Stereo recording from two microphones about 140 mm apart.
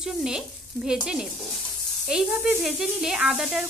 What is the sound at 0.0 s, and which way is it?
Sizzle, 5° right (ahead or behind).